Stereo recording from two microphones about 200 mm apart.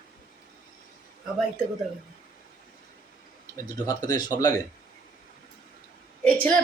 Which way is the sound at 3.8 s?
20° left (ahead or behind).